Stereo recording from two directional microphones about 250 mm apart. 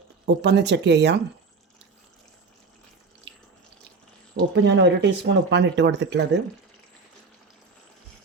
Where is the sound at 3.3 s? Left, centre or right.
Right.